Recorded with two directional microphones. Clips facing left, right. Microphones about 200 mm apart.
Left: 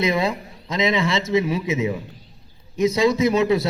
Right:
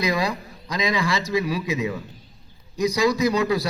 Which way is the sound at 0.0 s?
25° left (ahead or behind).